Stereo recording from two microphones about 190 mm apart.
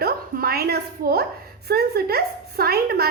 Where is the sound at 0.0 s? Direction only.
55° right (ahead or behind).